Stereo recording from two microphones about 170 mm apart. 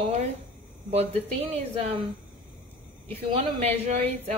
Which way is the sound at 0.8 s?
40° right (ahead or behind).